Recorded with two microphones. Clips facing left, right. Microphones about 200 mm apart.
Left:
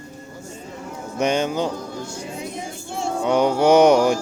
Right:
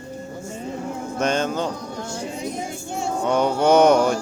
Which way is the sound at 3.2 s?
10° left (ahead or behind).